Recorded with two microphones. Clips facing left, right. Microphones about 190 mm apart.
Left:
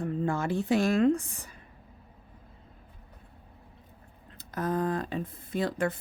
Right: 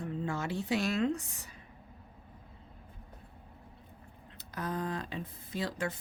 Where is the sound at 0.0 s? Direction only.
50° left (ahead or behind).